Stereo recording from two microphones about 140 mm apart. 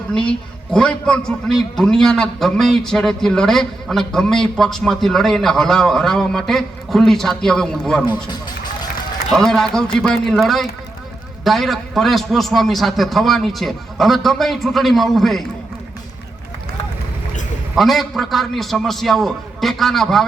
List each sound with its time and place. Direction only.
0.7 s a man's voice: 5° left (ahead or behind)
8.0 s speech: 30° left (ahead or behind)
9.3 s a man's voice: 5° left (ahead or behind)
17.7 s a man's voice: centre (ahead or behind)